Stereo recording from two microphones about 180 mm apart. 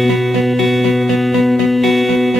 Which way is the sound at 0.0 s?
Centre (ahead or behind).